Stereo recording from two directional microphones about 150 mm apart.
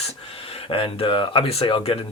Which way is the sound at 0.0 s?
40° left (ahead or behind).